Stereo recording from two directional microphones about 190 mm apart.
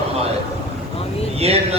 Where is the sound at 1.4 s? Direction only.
30° right (ahead or behind).